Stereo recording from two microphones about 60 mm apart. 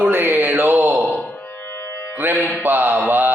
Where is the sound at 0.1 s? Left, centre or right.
Right.